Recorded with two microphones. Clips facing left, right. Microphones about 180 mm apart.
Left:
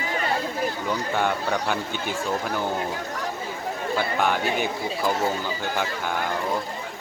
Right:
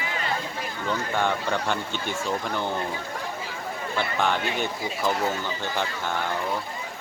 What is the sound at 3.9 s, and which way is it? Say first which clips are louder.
A man's voice: left 1 dB; 10° left (ahead or behind).